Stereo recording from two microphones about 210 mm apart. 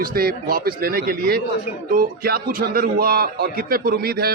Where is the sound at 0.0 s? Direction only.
45° right (ahead or behind).